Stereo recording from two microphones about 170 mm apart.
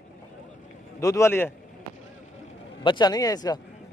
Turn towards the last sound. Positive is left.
turn(degrees=25)  # may be behind; listen again after turning